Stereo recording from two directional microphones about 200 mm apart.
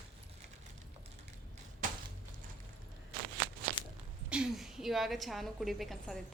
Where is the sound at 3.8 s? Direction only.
25° left (ahead or behind).